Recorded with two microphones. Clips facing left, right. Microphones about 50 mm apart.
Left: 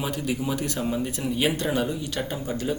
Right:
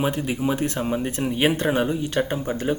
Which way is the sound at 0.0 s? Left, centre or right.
Right.